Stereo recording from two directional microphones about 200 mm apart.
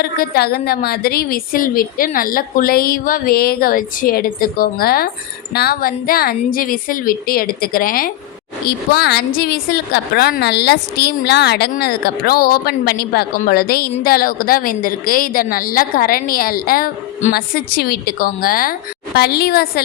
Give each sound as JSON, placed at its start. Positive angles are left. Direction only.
{"t": 0.0, "sound": "a woman's voice", "side_deg": 50}